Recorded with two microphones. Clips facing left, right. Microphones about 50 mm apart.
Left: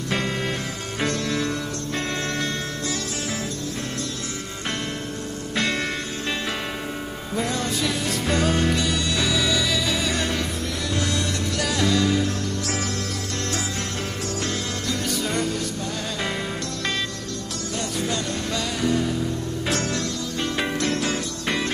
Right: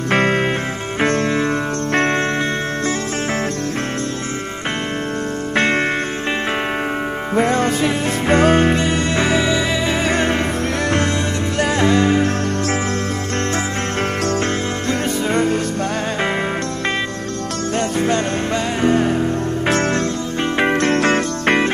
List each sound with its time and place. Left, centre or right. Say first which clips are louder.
0.1 s music: right 10 dB; right
5.6 s music: right 8 dB; right
7.3 s music: right 9 dB; right
11.5 s music: right 7 dB; right
14.9 s music: right 7 dB; right
17.7 s music: right 9 dB; right